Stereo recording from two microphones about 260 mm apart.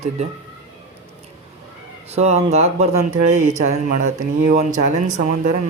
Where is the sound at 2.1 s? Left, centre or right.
Right.